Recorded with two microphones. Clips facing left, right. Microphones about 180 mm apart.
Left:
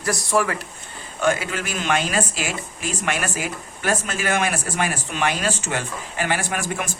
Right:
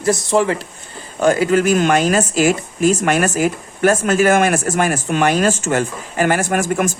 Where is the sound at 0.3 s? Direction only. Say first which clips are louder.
Right 3 dB; 25° right (ahead or behind).